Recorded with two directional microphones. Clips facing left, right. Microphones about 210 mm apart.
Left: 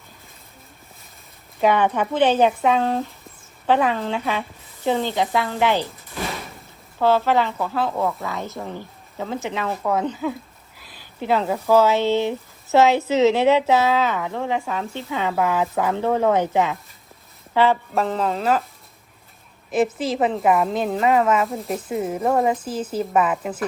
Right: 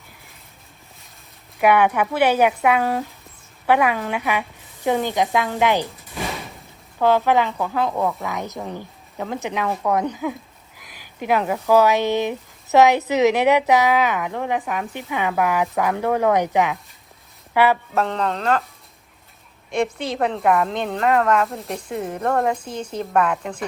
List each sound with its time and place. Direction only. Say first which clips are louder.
1.6 s speech: right 2 dB; 10° right (ahead or behind)
6.1 s a sound: even; centre (ahead or behind)
7.0 s speech: right 1 dB; 15° right (ahead or behind)
17.9 s a woman's voice: even; 5° left (ahead or behind)
19.7 s a woman's voice: left 2 dB; 5° left (ahead or behind)